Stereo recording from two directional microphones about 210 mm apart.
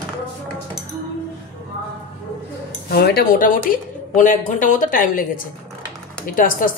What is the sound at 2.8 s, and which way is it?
Speech, 50° left (ahead or behind).